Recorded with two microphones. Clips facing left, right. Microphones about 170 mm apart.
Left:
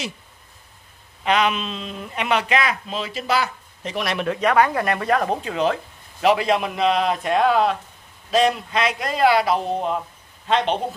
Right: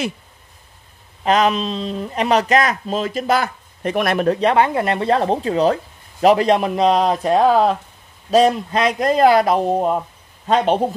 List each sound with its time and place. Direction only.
1.2 s speech: 40° right (ahead or behind)
4.3 s speech: 30° right (ahead or behind)